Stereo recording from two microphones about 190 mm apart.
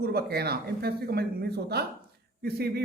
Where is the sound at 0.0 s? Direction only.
55° right (ahead or behind).